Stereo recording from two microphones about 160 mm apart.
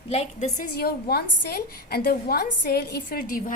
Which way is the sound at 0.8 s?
80° left.